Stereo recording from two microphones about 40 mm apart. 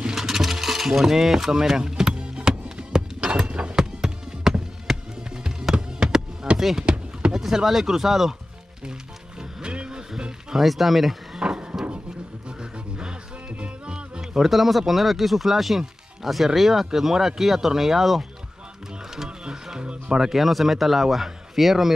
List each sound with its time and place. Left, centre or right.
0.0 s mechanisms: centre; by 3.7 s right
3.7 s music: centre
6.5 s a sound: centre
6.9 s a sound: right
7.3 s speech: centre
9.6 s vehicle: right
10.5 s a man's voice: centre
11.3 s a sound: centre
12.4 s music: right
14.4 s a man's voice: centre
19.2 s music: centre
20.2 s a man's voice: centre